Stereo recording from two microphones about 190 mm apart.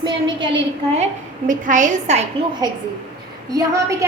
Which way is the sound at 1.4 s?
45° right (ahead or behind).